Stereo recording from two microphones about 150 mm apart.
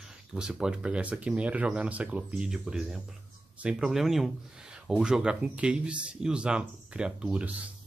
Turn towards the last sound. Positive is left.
turn(degrees=-5)  # may be behind; listen again after turning